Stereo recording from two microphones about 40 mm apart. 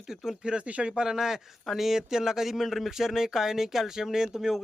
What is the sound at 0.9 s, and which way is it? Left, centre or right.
Speech, centre.